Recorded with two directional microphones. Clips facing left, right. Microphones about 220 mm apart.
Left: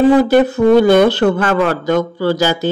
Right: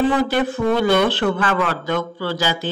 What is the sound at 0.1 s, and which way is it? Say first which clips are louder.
Speech: left 9 dB; 40° left (ahead or behind).